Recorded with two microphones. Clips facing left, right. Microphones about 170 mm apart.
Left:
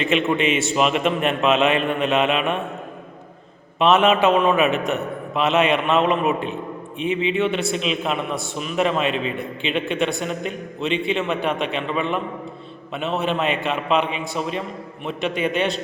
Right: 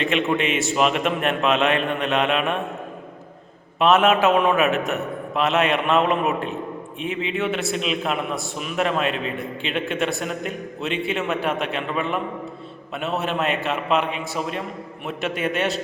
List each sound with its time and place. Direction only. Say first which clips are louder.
0.0 s a man's voice: left 2 dB; centre (ahead or behind)
3.8 s a man's voice: left 1 dB; centre (ahead or behind)